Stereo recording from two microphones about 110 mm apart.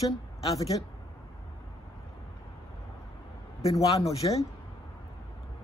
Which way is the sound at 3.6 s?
70° left (ahead or behind).